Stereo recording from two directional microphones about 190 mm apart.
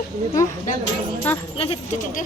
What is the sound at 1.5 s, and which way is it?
Speech, 30° left (ahead or behind).